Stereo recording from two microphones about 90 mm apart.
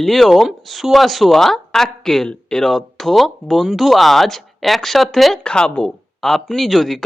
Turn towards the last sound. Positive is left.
turn(degrees=5)  # may be behind; listen again after turning